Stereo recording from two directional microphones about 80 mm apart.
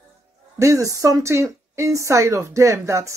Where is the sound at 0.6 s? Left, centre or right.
Right.